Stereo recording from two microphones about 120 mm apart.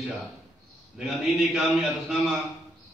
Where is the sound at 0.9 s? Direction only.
Centre (ahead or behind).